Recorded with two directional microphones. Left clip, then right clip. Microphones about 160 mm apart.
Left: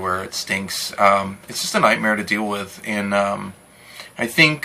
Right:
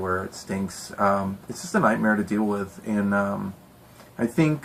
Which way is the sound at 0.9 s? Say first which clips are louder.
Left 7 dB; 15° left (ahead or behind).